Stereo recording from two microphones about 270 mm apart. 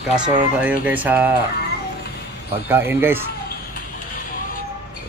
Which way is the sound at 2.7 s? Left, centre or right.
Centre.